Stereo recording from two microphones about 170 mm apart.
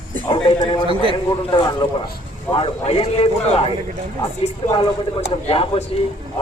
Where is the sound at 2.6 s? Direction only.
35° left (ahead or behind).